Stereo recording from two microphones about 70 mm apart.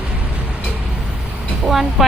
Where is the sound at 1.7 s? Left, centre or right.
Centre.